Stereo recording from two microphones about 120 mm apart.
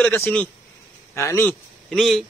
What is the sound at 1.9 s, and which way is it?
Speech, centre (ahead or behind).